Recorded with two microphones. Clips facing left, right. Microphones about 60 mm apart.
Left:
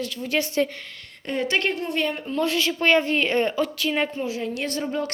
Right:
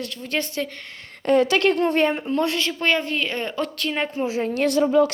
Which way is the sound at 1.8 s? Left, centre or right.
Right.